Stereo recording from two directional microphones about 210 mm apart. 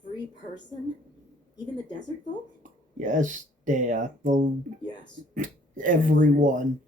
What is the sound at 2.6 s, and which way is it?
Speech, 35° right (ahead or behind).